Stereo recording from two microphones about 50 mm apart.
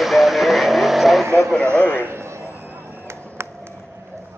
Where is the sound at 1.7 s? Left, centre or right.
Left.